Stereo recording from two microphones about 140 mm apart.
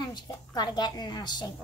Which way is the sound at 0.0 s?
30° left (ahead or behind).